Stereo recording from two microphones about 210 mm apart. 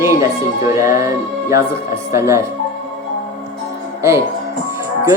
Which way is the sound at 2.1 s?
15° right (ahead or behind).